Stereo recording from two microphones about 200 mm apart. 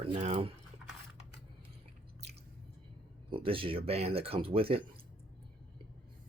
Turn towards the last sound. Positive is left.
turn(degrees=-30)  # may be behind; listen again after turning